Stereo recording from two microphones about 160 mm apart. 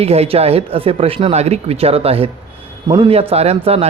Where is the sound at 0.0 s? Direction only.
40° right (ahead or behind).